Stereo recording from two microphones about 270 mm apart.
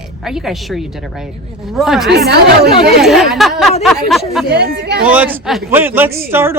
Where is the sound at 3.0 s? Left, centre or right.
Centre.